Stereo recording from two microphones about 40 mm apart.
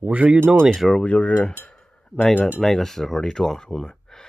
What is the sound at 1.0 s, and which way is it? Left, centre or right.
Speech, left.